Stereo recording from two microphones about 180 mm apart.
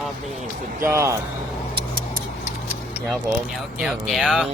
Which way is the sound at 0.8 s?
15° right (ahead or behind).